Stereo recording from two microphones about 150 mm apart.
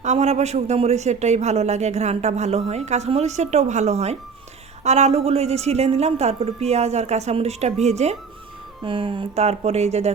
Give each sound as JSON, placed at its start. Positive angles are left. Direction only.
{"t": 0.0, "sound": "a man's voice", "side_deg": -50}
{"t": 8.8, "sound": "a man's voice", "side_deg": -35}